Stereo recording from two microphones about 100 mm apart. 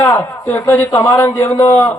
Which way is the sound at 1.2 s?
25° left (ahead or behind).